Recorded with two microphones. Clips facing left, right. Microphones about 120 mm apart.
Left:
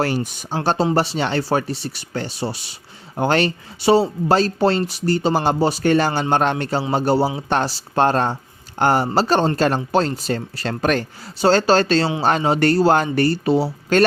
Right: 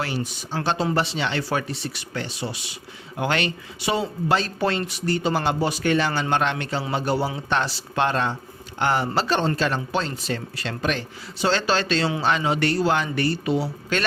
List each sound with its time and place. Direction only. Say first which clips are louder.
0.0 s speech: left 6 dB; 50° left (ahead or behind)
0.5 s speech: left 5 dB; 40° left (ahead or behind)